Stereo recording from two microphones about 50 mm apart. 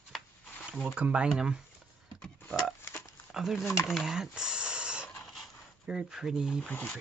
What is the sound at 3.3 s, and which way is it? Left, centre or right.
Speech, centre.